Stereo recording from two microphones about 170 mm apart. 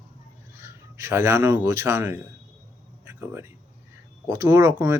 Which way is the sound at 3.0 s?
15° right (ahead or behind).